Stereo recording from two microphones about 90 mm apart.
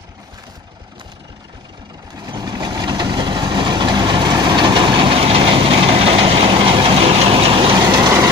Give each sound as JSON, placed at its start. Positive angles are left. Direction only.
{"t": 2.1, "sound": "vehicle", "side_deg": -45}
{"t": 7.8, "sound": "vehicle", "side_deg": -45}